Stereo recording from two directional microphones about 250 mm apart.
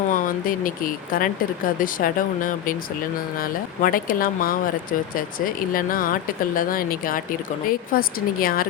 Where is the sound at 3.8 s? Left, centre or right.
Left.